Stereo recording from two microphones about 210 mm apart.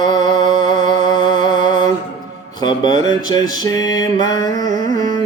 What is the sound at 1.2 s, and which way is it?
Music, 40° right (ahead or behind).